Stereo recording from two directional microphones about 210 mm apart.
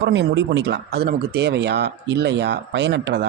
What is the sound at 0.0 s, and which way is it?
A man's voice, 55° right (ahead or behind).